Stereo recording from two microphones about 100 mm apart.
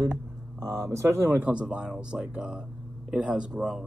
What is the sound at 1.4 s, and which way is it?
Speech, 15° right (ahead or behind).